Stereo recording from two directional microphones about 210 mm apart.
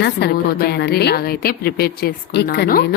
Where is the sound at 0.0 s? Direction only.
50° left (ahead or behind).